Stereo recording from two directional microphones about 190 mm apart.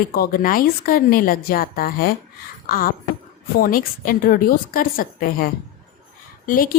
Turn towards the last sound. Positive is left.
turn(degrees=50)  # may be behind; listen again after turning